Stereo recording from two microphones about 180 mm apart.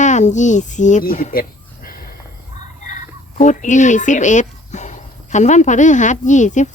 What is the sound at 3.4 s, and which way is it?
Speech, 40° left (ahead or behind).